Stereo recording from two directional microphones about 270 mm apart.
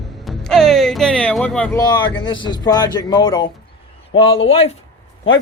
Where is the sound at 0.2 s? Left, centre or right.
Centre.